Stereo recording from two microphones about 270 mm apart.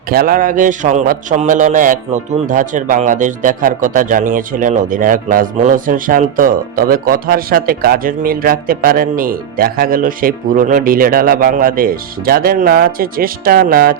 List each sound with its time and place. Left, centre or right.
0.1 s a man's voice: right